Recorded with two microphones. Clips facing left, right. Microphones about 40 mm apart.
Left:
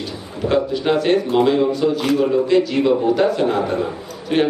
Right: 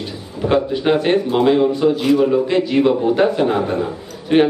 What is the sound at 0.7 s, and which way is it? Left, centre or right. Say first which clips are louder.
A man's voice: right 1 dB; centre.